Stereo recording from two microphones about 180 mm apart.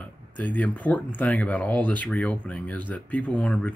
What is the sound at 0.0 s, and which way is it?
Speech, 10° left (ahead or behind).